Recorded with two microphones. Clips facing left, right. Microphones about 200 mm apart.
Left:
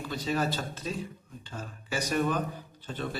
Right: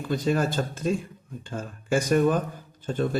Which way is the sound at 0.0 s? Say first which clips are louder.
Right 6 dB; 50° right (ahead or behind).